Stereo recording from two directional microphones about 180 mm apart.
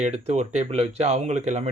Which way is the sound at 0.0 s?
40° right (ahead or behind).